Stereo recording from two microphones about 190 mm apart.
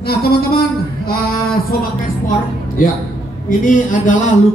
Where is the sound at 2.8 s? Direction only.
45° left (ahead or behind).